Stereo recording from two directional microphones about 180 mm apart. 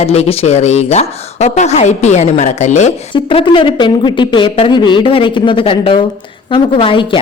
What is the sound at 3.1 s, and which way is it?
A woman's voice, 25° left (ahead or behind).